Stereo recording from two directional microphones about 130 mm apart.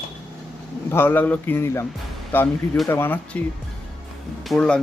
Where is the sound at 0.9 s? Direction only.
15° left (ahead or behind).